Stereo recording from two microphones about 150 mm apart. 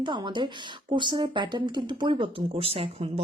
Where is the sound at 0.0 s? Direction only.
30° right (ahead or behind).